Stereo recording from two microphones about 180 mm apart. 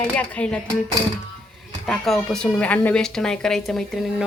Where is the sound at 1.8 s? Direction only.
Centre (ahead or behind).